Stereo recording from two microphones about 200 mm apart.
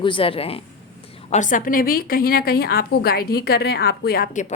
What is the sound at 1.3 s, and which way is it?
A woman's voice, 40° left (ahead or behind).